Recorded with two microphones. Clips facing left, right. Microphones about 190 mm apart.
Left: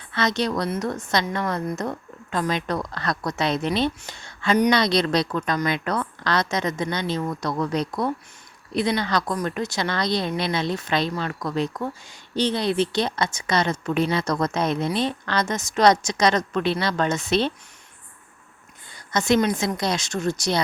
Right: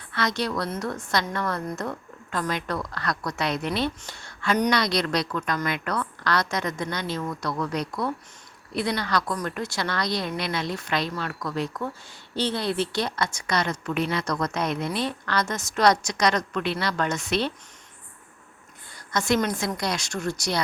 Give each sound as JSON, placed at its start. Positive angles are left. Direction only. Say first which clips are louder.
{"t": 0.1, "sound": "a woman's voice", "louder": "left 3 dB", "side_deg": 20}
{"t": 19.1, "sound": "a woman's voice", "louder": "left 4 dB", "side_deg": 20}